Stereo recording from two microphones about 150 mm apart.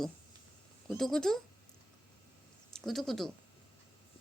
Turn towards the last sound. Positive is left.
turn(degrees=0)  # may be behind; listen again after turning